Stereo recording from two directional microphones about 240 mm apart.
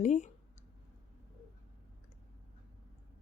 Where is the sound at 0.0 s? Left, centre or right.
Left.